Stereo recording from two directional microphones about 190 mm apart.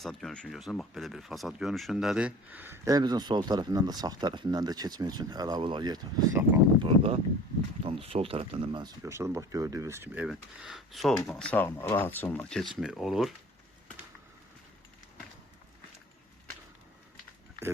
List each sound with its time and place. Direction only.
0.0 s speech: centre (ahead or behind); by 8.9 s 25° right (ahead or behind)
9.0 s speech: 15° right (ahead or behind)